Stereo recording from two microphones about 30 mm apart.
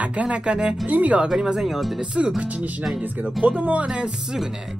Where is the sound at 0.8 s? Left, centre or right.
Right.